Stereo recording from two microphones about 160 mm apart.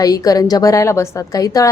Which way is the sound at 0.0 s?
20° left (ahead or behind).